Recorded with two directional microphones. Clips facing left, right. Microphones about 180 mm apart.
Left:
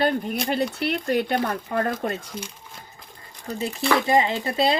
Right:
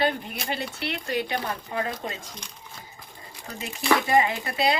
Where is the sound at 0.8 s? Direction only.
45° left (ahead or behind).